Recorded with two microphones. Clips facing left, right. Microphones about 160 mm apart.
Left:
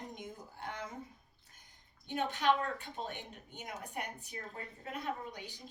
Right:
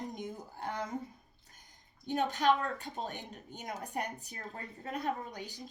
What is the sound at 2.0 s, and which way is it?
A woman's voice, 40° right (ahead or behind).